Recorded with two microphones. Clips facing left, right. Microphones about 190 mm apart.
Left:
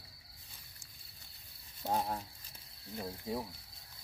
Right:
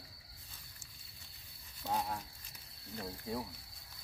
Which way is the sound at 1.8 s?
35° left (ahead or behind).